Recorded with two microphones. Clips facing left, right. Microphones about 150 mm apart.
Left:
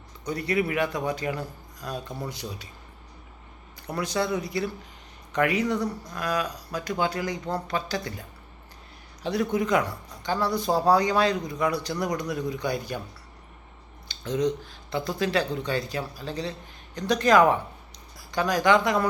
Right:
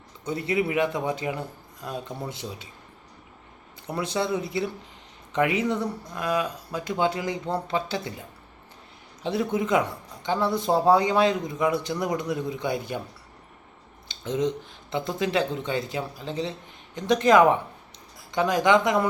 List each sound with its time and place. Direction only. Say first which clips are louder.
0.3 s speech: right 1 dB; 20° right (ahead or behind)
3.8 s speech: even; 25° right (ahead or behind)
9.2 s speech: even; 25° right (ahead or behind)
14.1 s speech: even; 25° right (ahead or behind)